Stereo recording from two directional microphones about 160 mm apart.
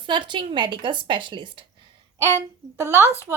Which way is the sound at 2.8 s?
15° right (ahead or behind).